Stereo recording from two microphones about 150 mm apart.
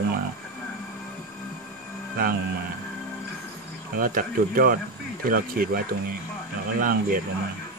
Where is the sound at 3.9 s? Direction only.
75° right (ahead or behind).